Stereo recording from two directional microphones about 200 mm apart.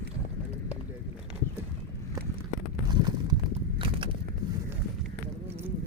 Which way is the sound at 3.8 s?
25° right (ahead or behind).